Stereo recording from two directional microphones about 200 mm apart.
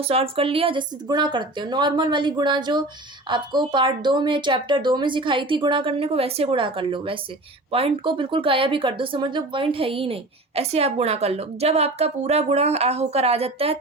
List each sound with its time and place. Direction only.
0.0 s a woman's voice: 30° right (ahead or behind)